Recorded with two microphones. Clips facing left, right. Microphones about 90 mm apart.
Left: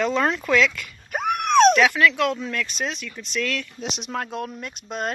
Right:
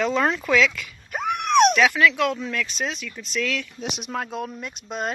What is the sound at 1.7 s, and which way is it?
Speech, centre (ahead or behind).